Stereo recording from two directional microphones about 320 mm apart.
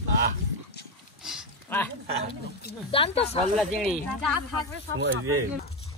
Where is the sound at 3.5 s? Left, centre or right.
Centre.